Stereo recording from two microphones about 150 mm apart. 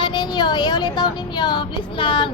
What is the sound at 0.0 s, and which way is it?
Speech, 30° left (ahead or behind).